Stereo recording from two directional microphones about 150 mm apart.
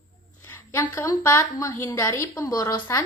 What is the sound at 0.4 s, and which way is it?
A woman's voice, 15° left (ahead or behind).